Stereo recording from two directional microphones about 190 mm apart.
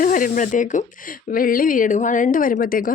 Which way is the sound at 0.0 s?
45° left (ahead or behind).